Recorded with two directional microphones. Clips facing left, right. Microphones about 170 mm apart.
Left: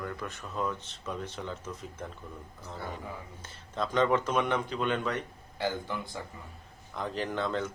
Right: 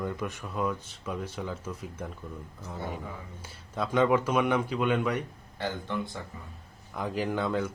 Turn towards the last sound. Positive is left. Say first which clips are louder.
# right 3 dB
turn(degrees=-10)  # may be behind; listen again after turning